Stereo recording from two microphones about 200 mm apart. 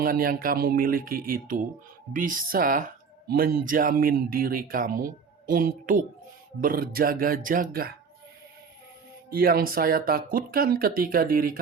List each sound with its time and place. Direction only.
0.0 s speech: 45° right (ahead or behind)
9.3 s speech: 45° right (ahead or behind)